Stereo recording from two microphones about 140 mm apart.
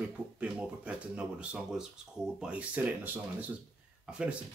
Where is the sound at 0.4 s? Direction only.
10° right (ahead or behind).